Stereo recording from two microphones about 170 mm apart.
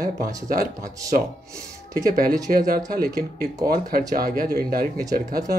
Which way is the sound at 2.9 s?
60° right (ahead or behind).